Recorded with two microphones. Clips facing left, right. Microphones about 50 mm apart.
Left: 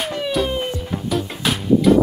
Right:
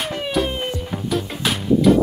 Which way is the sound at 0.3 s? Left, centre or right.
Centre.